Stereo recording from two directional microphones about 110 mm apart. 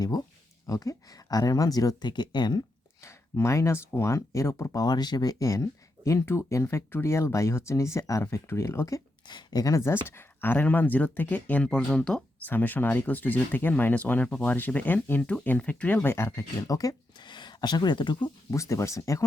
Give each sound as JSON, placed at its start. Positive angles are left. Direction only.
{"t": 0.0, "sound": "speech", "side_deg": 35}
{"t": 3.0, "sound": "speech", "side_deg": 25}
{"t": 9.2, "sound": "speech", "side_deg": 40}
{"t": 18.5, "sound": "speech", "side_deg": 25}